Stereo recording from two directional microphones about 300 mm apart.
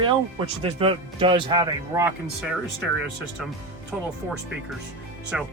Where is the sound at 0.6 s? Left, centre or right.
Centre.